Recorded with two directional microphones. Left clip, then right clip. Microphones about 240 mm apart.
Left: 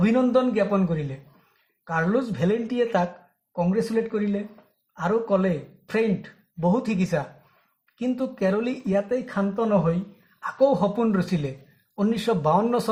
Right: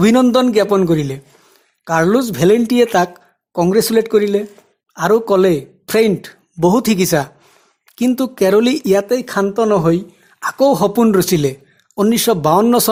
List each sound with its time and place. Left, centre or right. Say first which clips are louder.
0.0 s speech: right 9 dB; right